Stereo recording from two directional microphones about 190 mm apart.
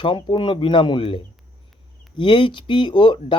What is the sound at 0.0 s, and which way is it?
Speech, 25° left (ahead or behind).